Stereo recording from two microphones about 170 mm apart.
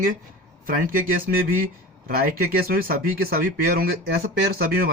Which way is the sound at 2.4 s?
60° right (ahead or behind).